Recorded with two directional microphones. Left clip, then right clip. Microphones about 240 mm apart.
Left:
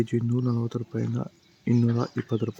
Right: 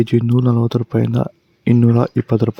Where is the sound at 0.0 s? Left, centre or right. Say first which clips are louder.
Right 11 dB; right.